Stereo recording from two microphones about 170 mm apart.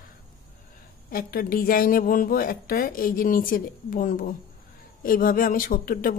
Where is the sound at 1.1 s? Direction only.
60° left (ahead or behind).